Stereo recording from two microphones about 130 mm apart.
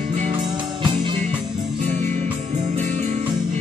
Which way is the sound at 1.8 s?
65° right (ahead or behind).